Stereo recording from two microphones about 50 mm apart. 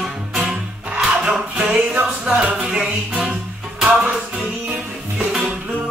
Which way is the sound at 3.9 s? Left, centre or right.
Right.